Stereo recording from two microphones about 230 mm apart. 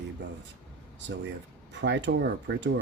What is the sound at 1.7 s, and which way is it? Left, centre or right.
Speech, right.